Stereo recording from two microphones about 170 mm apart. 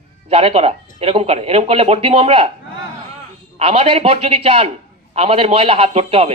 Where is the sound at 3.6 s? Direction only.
35° right (ahead or behind).